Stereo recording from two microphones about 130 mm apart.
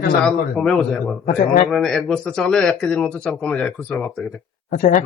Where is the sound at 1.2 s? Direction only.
90° left.